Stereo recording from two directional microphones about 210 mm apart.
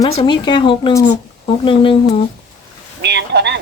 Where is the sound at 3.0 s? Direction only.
55° right (ahead or behind).